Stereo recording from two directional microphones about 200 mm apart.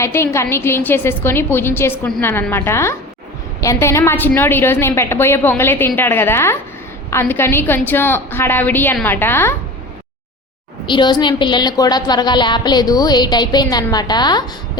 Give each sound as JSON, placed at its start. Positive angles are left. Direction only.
{"t": 0.0, "sound": "a woman's voice", "side_deg": 15}
{"t": 10.8, "sound": "a woman's voice", "side_deg": 25}